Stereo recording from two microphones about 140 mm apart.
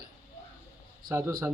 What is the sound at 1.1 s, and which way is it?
Speech, 20° right (ahead or behind).